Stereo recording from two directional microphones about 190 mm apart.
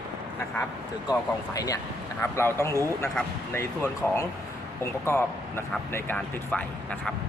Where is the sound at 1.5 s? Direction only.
20° left (ahead or behind).